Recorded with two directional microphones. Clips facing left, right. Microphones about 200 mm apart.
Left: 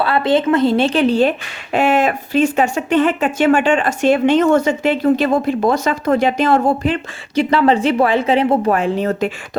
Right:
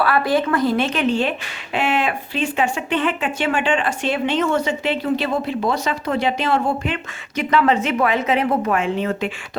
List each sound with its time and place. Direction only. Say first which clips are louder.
0.0 s a woman's voice: left 3 dB; 25° left (ahead or behind)